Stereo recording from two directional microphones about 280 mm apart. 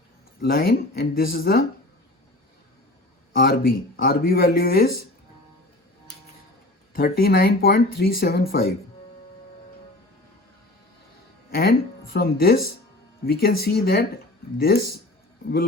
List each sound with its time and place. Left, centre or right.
0.4 s speech: left
3.3 s speech: left
6.9 s speech: left
11.5 s speech: left